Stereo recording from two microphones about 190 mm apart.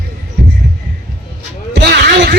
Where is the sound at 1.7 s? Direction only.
60° right (ahead or behind).